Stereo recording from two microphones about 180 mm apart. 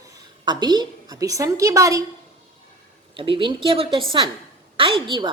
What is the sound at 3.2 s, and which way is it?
A woman's voice, 30° right (ahead or behind).